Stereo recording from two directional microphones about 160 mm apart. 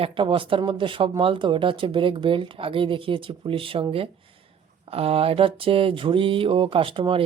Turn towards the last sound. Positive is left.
turn(degrees=-35)  # may be behind; listen again after turning